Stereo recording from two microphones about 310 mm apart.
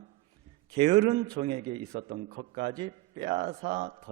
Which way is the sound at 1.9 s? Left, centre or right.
Right.